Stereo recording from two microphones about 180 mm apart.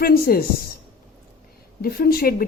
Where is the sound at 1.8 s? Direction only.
55° left (ahead or behind).